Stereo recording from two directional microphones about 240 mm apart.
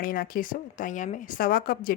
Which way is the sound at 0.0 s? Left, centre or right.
Left.